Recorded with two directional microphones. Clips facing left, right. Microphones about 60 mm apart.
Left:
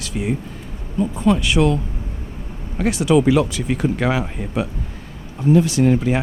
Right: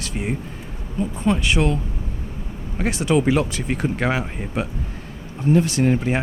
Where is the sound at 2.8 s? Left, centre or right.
Right.